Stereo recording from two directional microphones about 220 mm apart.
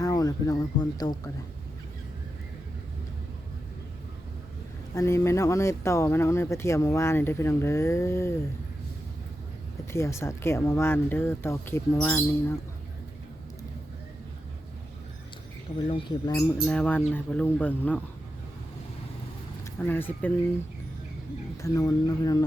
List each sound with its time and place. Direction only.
0.0 s speech: 15° left (ahead or behind)
4.9 s speech: 15° left (ahead or behind)
9.9 s speech: 10° left (ahead or behind)
16.0 s speech: 20° left (ahead or behind)
16.6 s speech: 5° left (ahead or behind)
19.8 s speech: 10° left (ahead or behind)
21.6 s speech: 15° left (ahead or behind)